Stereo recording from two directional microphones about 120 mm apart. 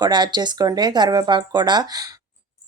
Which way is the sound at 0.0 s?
40° right (ahead or behind).